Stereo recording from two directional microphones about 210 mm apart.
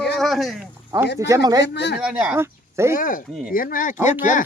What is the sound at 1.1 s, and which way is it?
Speech, 15° right (ahead or behind).